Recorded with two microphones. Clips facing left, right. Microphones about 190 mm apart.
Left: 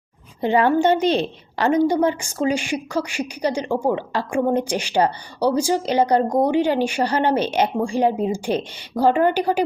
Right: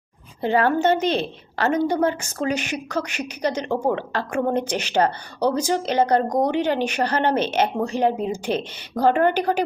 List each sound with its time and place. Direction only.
0.4 s a woman's voice: 15° left (ahead or behind)